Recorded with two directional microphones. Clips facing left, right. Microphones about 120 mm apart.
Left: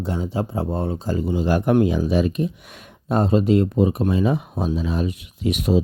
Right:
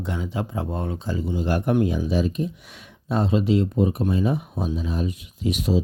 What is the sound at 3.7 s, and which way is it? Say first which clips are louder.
Speech: left 3 dB; 90° left.